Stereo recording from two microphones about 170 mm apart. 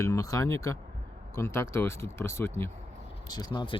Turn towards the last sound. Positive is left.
turn(degrees=30)  # may be behind; listen again after turning